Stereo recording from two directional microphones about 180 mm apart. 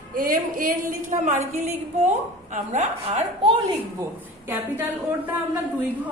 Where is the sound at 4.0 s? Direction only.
10° right (ahead or behind).